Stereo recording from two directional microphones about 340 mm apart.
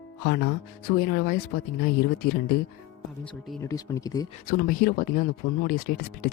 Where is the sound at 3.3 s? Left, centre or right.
Centre.